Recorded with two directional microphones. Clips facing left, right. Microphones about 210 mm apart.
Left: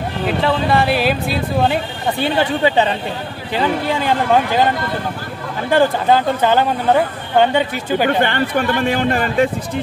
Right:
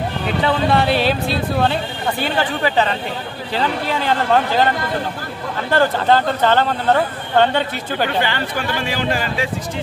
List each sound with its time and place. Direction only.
0.4 s speech: centre (ahead or behind)
5.7 s speech: 15° left (ahead or behind)
8.2 s a man's voice: 55° left (ahead or behind)